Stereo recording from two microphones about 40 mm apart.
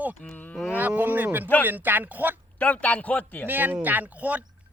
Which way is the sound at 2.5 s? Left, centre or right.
Left.